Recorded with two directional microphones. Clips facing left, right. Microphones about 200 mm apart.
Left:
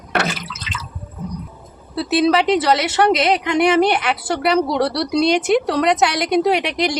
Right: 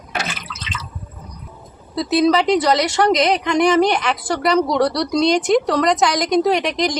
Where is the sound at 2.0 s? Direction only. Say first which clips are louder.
Even; 5° left (ahead or behind).